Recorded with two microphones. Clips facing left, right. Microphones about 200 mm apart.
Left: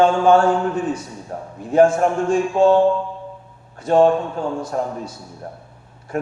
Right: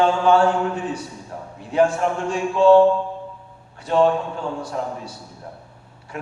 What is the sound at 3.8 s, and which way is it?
A man's voice, 45° left (ahead or behind).